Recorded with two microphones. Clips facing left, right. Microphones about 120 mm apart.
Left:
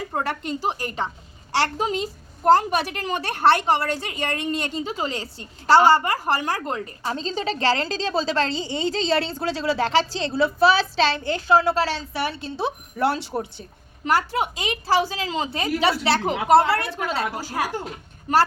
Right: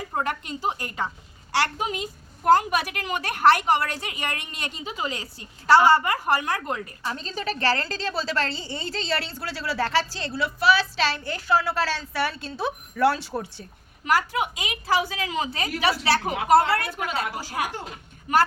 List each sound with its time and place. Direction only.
0.1 s a woman's voice: 30° left (ahead or behind)
8.5 s a woman's voice: 90° left
9.0 s a woman's voice: 25° left (ahead or behind)
14.0 s a woman's voice: 35° left (ahead or behind)